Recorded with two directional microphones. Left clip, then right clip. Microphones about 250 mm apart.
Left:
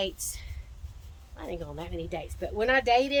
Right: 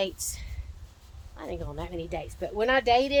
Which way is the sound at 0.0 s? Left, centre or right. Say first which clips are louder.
Right 2 dB; centre.